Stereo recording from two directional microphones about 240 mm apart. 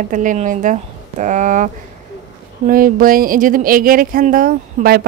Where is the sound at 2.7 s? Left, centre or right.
Right.